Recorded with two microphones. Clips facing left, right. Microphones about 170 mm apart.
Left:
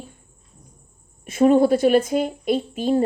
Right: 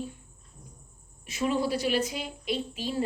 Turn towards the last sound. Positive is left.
turn(degrees=50)  # may be behind; listen again after turning